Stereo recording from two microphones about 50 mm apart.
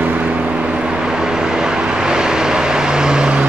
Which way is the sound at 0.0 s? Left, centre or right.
Right.